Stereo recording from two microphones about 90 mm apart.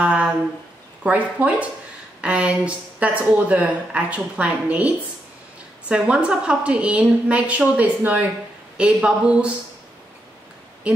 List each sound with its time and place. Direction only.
0.0 s a sound: 15° right (ahead or behind)
1.0 s speech: 15° right (ahead or behind)
10.9 s speech: 15° right (ahead or behind)